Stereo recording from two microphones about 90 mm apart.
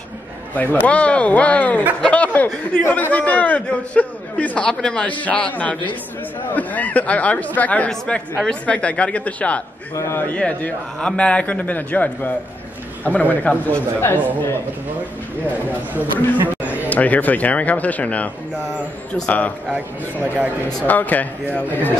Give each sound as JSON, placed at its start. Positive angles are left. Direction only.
{"t": 0.6, "sound": "speech", "side_deg": 20}
{"t": 9.9, "sound": "a man's voice", "side_deg": 30}
{"t": 10.3, "sound": "a man's voice", "side_deg": 15}
{"t": 16.3, "sound": "a sound", "side_deg": -20}
{"t": 16.9, "sound": "speech", "side_deg": 15}
{"t": 19.7, "sound": "speech", "side_deg": -15}
{"t": 20.8, "sound": "speech", "side_deg": 20}